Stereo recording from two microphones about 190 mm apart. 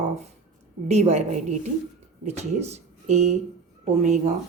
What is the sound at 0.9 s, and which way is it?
Speech, 35° right (ahead or behind).